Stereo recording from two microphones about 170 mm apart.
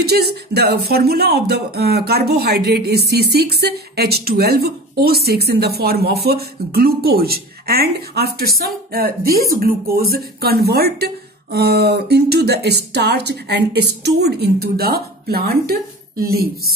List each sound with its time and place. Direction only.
0.0 s speech: 70° right (ahead or behind)